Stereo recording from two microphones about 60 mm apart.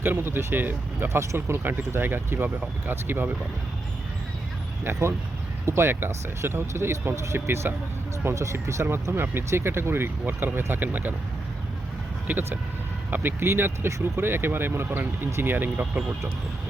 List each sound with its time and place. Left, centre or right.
0.2 s speech: right
1.4 s speech: right
4.8 s speech: right
12.3 s speech: right
13.4 s speech: right